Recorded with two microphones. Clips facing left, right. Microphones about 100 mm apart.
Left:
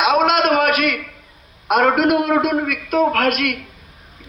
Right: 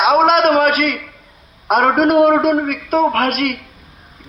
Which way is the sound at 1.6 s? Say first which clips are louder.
Right 2 dB; 40° right (ahead or behind).